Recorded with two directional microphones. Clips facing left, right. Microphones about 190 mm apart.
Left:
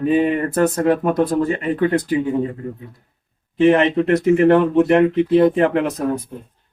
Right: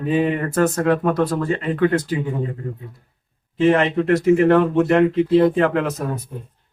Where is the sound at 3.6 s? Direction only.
20° left (ahead or behind).